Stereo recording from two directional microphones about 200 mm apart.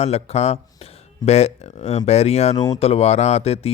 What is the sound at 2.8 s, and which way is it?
Speech, 30° left (ahead or behind).